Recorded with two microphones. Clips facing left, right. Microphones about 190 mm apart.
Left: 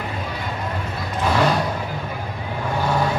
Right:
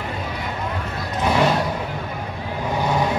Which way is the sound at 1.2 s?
20° right (ahead or behind).